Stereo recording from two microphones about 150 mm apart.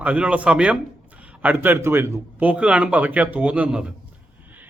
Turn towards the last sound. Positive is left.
turn(degrees=-10)  # may be behind; listen again after turning